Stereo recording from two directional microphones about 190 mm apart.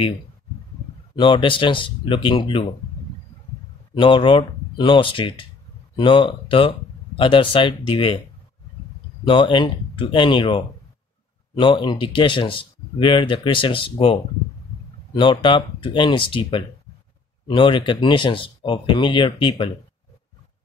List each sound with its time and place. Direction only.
1.1 s speech: 25° left (ahead or behind)
3.9 s speech: 25° left (ahead or behind)
9.2 s speech: 25° left (ahead or behind)